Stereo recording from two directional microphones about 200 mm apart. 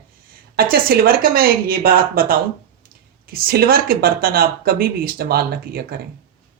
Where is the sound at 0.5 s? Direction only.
50° right (ahead or behind).